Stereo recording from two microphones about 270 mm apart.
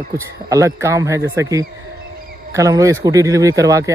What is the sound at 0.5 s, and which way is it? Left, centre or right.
Speech, centre.